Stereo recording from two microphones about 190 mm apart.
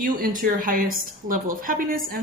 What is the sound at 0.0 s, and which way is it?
A woman's voice, 45° right (ahead or behind).